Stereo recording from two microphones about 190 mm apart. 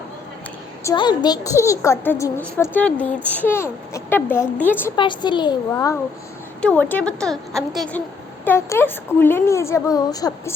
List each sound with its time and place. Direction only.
0.9 s a woman's voice: 20° left (ahead or behind)
4.9 s a woman's voice: 25° left (ahead or behind)